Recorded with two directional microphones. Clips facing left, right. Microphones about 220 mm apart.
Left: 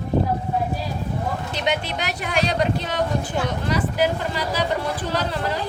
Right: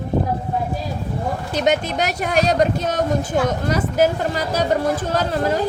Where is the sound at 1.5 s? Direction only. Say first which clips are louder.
Right 8 dB; 45° right (ahead or behind).